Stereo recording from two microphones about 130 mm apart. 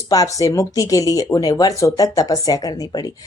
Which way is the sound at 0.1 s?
25° left (ahead or behind).